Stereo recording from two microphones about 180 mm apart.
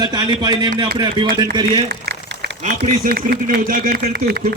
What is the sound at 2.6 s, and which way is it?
A man's voice, 45° right (ahead or behind).